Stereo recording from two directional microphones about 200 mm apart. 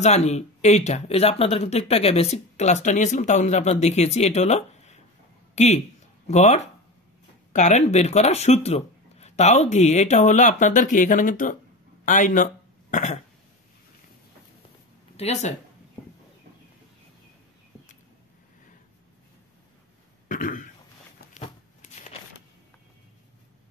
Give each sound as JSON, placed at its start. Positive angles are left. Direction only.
{"t": 0.0, "sound": "a man's voice", "side_deg": 35}
{"t": 15.1, "sound": "speech", "side_deg": 30}
{"t": 20.2, "sound": "burping", "side_deg": 40}